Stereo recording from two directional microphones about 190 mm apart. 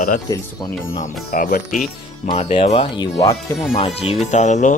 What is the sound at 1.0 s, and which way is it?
Speech, 45° left (ahead or behind).